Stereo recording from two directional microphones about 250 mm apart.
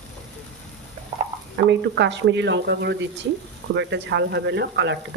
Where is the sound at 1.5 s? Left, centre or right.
Right.